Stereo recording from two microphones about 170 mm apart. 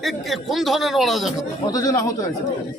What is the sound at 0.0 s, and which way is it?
A man's voice, centre (ahead or behind).